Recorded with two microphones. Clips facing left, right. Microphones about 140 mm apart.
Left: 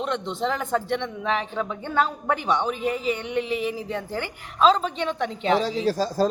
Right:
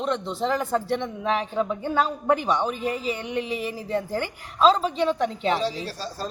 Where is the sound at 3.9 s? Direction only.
10° right (ahead or behind).